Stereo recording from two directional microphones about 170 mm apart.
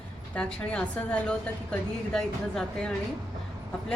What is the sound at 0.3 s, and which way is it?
A woman's voice, 5° left (ahead or behind).